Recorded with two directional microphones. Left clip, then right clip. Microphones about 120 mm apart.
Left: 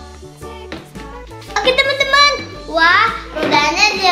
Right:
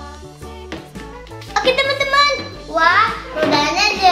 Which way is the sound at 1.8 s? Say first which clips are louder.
Left 5 dB; 70° left (ahead or behind).